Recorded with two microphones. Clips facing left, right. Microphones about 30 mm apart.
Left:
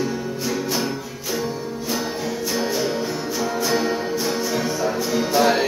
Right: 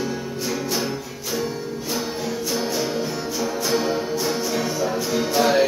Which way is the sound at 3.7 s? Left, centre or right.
Centre.